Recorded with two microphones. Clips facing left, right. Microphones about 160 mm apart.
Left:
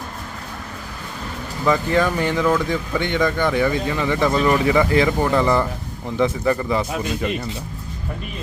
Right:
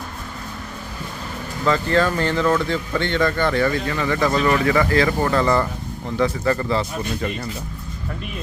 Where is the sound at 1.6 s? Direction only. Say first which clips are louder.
Even; 15° left (ahead or behind).